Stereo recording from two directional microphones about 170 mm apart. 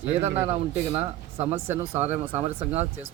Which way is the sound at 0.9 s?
40° right (ahead or behind).